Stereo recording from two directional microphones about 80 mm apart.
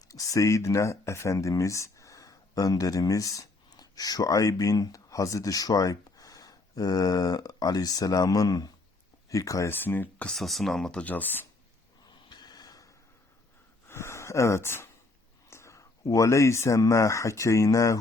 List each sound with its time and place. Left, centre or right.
0.1 s speech: left
9.6 s speech: left
10.2 s speech: centre
11.0 s speech: left
12.0 s snort: left
13.8 s a sound: left
15.4 s speech: left